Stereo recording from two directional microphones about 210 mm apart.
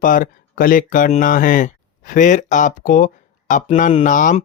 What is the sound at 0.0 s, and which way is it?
Speech, 40° left (ahead or behind).